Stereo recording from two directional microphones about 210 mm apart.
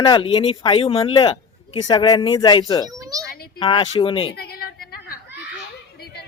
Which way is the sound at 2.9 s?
15° right (ahead or behind).